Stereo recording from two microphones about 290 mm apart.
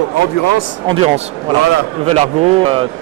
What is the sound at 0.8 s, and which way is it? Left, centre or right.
Speech, right.